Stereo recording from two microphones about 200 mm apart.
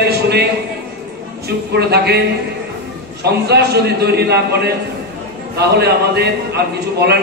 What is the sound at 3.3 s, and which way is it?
A man's voice, 55° right (ahead or behind).